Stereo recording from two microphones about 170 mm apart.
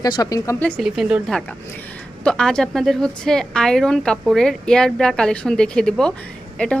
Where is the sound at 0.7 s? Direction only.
Centre (ahead or behind).